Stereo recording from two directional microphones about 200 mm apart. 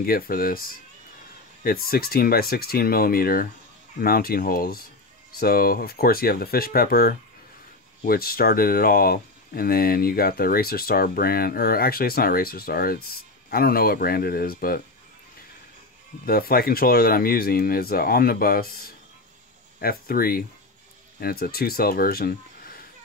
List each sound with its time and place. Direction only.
0.0 s speech: 45° left (ahead or behind)
16.3 s speech: 50° left (ahead or behind)